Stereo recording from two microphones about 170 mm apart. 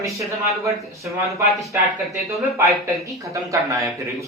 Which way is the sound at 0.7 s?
20° right (ahead or behind).